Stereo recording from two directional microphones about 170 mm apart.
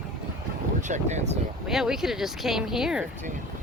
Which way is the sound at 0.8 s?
45° right (ahead or behind).